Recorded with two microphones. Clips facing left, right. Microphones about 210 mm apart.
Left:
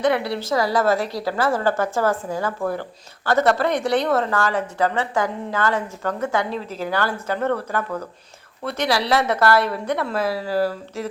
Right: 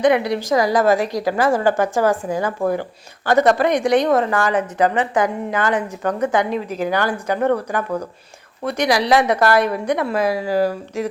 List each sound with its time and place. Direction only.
0.0 s a woman's voice: 15° right (ahead or behind)